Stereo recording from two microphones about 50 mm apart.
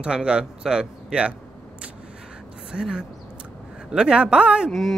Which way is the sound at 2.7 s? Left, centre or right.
Centre.